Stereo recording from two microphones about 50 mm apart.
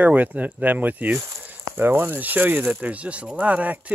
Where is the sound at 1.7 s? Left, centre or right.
Right.